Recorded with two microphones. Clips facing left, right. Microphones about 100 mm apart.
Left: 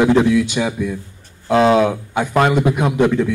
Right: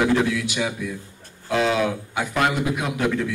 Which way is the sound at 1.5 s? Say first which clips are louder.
Left 8 dB; 35° left (ahead or behind).